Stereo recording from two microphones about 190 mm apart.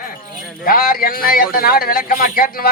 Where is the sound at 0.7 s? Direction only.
50° left (ahead or behind).